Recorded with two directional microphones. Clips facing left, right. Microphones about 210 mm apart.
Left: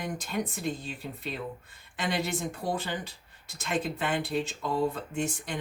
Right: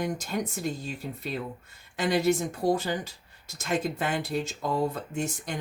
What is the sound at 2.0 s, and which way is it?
Speech, 40° right (ahead or behind).